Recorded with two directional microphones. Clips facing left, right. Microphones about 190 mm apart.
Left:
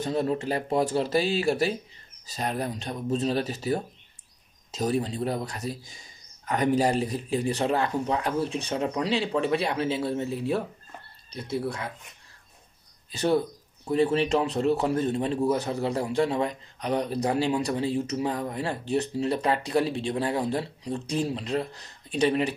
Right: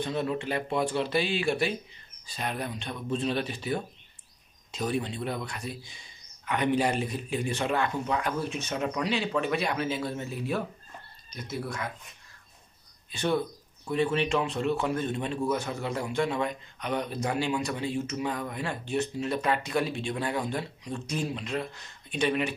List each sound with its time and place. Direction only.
0.0 s a man's voice: 35° left (ahead or behind)
13.1 s a man's voice: 40° left (ahead or behind)